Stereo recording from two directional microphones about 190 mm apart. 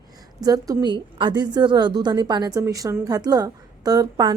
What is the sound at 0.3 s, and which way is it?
A woman's voice, 20° right (ahead or behind).